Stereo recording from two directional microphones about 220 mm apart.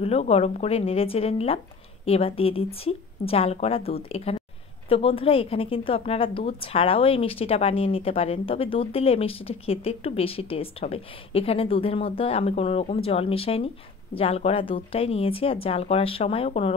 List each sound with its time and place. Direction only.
0.0 s a woman's voice: 30° left (ahead or behind)